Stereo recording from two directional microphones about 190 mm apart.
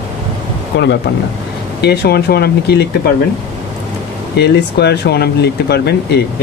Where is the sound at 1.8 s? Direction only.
60° left (ahead or behind).